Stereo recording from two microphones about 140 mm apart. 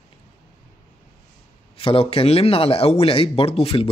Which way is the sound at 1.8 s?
40° left (ahead or behind).